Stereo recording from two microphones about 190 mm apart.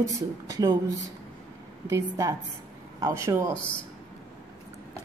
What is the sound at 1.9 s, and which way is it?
A woman's voice, 15° right (ahead or behind).